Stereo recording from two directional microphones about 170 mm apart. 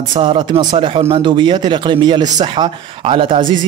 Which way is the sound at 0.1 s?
25° right (ahead or behind).